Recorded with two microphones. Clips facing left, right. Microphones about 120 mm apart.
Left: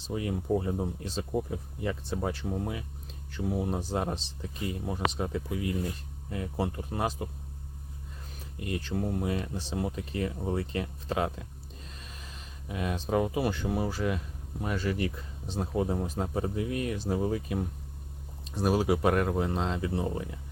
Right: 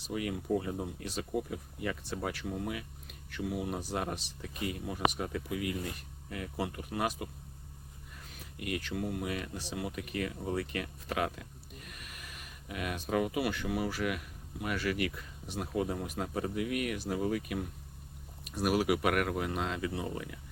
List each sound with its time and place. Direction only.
0.1 s speech: 30° left (ahead or behind)
8.5 s speech: 30° left (ahead or behind)